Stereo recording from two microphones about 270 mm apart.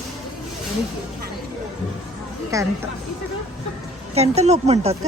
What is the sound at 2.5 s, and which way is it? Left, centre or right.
Speech, centre.